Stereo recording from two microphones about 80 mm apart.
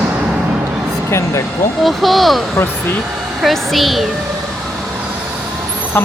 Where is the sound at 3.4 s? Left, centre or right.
Centre.